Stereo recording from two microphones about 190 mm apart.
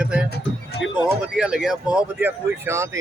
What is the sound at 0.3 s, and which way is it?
Music, 60° left (ahead or behind).